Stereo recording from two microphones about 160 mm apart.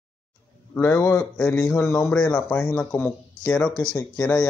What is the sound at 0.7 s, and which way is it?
Speech, 10° left (ahead or behind).